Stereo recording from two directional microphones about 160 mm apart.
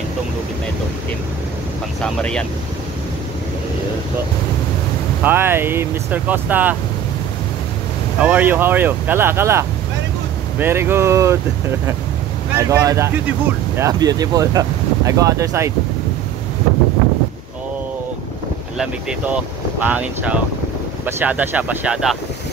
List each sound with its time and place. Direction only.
5.2 s speech: 15° right (ahead or behind)
8.2 s speech: 10° right (ahead or behind)
12.5 s speech: 20° right (ahead or behind)
18.8 s speech: 5° right (ahead or behind)